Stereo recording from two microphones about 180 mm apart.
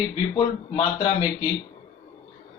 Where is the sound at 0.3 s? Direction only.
30° left (ahead or behind).